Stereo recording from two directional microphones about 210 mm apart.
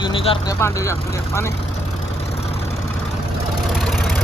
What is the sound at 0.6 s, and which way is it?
Speech, 15° left (ahead or behind).